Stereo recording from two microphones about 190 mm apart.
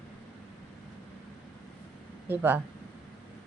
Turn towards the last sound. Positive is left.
turn(degrees=-10)  # may be behind; listen again after turning